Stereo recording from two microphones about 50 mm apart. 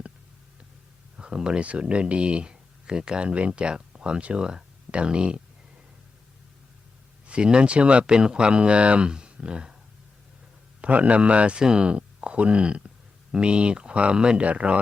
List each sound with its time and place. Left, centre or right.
1.1 s speech: centre
7.3 s speech: right
10.8 s speech: right